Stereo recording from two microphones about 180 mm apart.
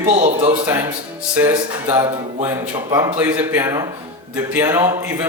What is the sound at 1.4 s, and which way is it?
Speech, 10° right (ahead or behind).